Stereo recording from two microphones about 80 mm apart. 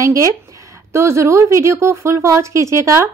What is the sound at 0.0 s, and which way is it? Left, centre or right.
A woman's voice, right.